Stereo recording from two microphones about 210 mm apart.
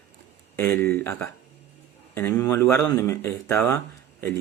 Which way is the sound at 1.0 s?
10° left (ahead or behind).